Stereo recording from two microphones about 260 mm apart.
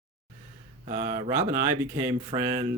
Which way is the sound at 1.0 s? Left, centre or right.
Centre.